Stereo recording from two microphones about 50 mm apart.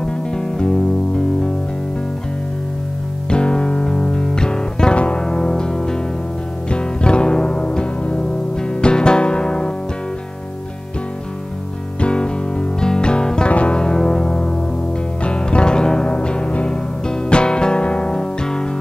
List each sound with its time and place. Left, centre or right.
0.0 s music: centre
3.3 s music: centre
12.0 s music: left